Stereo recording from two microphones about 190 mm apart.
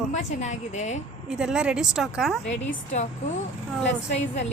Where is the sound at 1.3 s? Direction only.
5° right (ahead or behind).